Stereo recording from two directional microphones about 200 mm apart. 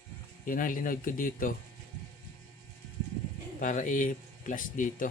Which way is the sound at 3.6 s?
40° left (ahead or behind).